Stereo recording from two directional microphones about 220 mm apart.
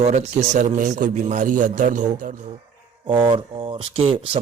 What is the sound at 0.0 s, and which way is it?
A man's voice, 30° right (ahead or behind).